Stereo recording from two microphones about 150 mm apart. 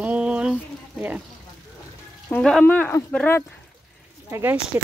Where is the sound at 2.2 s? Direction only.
5° left (ahead or behind).